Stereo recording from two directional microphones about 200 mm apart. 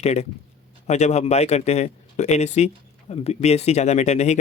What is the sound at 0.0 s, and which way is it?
Speech, 35° left (ahead or behind).